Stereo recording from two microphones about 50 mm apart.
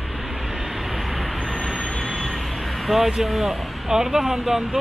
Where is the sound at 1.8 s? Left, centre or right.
Left.